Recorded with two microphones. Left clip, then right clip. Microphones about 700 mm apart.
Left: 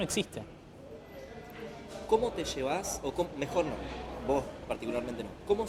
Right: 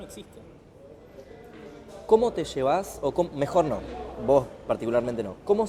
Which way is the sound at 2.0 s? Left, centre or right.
Right.